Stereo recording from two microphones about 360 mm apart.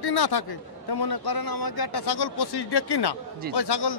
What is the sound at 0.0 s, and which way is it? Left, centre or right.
A man's voice, left.